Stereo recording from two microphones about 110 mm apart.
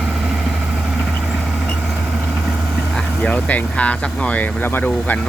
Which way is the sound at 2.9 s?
10° left (ahead or behind).